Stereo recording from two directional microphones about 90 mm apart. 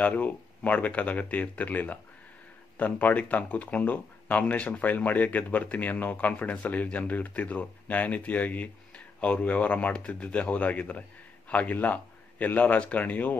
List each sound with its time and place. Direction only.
0.0 s speech: 15° left (ahead or behind)